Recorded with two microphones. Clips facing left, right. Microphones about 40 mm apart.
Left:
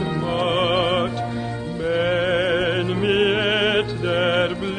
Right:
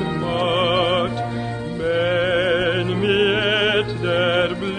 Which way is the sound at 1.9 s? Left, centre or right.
Centre.